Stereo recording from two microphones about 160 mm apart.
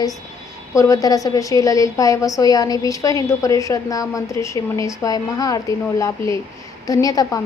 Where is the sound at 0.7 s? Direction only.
20° left (ahead or behind).